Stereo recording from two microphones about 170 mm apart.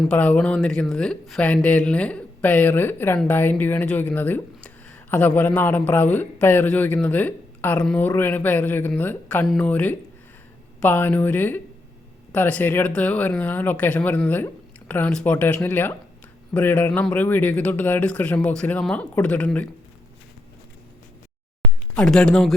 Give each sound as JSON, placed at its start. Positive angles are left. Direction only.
{"t": 0.0, "sound": "speech", "side_deg": 5}
{"t": 21.9, "sound": "speech", "side_deg": 5}